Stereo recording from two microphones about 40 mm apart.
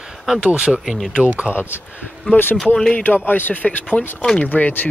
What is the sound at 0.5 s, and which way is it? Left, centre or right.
Speech, right.